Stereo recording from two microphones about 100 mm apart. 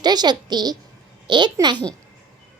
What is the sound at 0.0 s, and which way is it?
A woman's voice, 45° right (ahead or behind).